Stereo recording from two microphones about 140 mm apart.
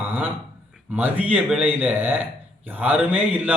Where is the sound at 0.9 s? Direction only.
15° right (ahead or behind).